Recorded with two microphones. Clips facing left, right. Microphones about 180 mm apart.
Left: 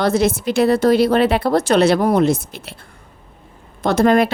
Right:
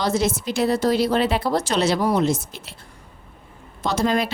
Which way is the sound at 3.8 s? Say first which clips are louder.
Left 7 dB; 55° left (ahead or behind).